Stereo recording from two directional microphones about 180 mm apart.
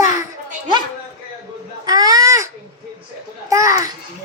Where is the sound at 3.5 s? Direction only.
20° right (ahead or behind).